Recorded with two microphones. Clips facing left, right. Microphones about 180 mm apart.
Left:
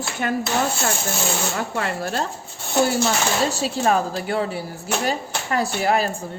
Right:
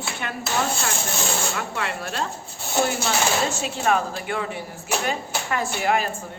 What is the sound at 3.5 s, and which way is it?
Speech, 35° left (ahead or behind).